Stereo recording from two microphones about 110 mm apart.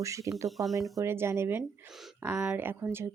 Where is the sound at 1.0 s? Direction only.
25° right (ahead or behind).